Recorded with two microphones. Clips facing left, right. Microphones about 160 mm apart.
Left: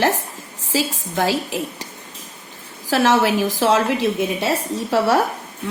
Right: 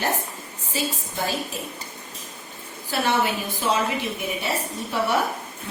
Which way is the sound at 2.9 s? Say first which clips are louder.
Left 7 dB; 90° left.